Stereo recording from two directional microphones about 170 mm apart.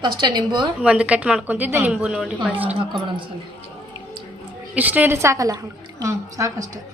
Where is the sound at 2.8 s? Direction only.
30° right (ahead or behind).